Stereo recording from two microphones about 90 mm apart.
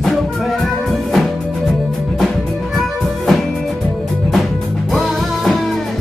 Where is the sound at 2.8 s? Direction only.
Centre (ahead or behind).